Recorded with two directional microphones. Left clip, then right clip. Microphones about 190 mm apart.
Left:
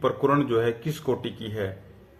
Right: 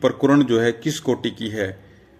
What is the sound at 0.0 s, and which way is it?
A man's voice, 40° right (ahead or behind).